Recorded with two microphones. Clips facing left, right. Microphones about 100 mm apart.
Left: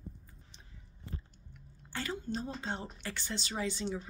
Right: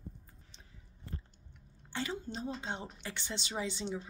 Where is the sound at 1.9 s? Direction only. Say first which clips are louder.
Left 1 dB; 20° right (ahead or behind).